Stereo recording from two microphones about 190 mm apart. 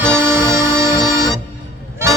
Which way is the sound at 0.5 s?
15° right (ahead or behind).